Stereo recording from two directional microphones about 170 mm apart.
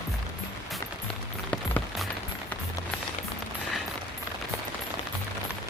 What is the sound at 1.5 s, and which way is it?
Music, 5° left (ahead or behind).